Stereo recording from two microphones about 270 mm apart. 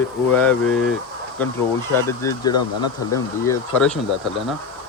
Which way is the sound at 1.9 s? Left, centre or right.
Centre.